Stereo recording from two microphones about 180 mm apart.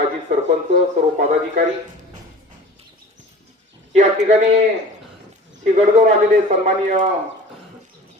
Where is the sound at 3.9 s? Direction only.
40° right (ahead or behind).